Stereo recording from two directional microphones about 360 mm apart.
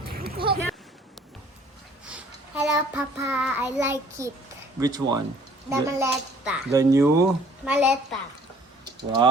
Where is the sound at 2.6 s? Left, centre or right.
Centre.